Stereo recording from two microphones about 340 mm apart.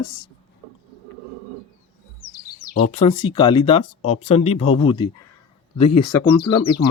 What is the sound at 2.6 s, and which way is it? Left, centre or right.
Speech, centre.